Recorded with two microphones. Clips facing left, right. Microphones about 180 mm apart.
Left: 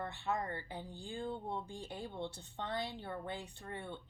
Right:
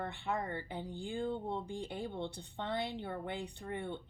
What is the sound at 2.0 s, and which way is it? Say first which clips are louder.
Speech: right 1 dB; 55° right (ahead or behind).